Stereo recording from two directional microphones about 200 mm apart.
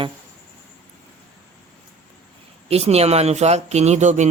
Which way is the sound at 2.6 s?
30° right (ahead or behind).